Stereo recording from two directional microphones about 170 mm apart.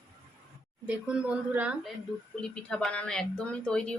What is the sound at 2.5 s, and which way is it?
A woman's voice, 5° left (ahead or behind).